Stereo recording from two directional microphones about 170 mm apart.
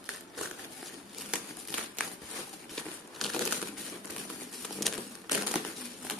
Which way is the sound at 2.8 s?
Centre (ahead or behind).